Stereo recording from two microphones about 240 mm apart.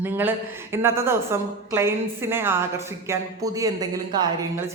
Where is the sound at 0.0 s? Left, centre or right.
Centre.